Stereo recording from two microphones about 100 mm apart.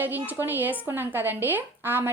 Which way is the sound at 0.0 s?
20° right (ahead or behind).